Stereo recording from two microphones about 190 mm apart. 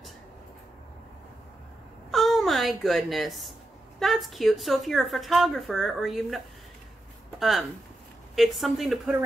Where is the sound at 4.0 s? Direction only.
Centre (ahead or behind).